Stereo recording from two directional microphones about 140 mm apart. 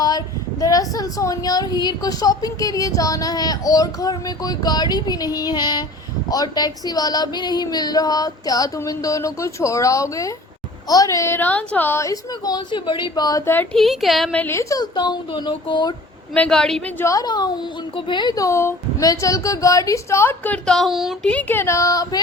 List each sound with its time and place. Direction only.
0.6 s a woman's voice: 25° left (ahead or behind)
13.7 s a woman's voice: centre (ahead or behind)
14.3 s speech: 15° left (ahead or behind); by 16.0 s 30° left (ahead or behind)
16.3 s a woman's voice: 5° left (ahead or behind)
17.0 s a woman's voice: 25° left (ahead or behind); by 21.3 s centre (ahead or behind)
21.3 s a woman's voice: 15° left (ahead or behind)